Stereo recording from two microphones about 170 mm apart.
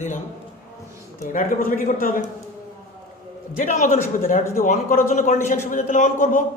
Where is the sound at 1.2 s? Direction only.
50° left (ahead or behind).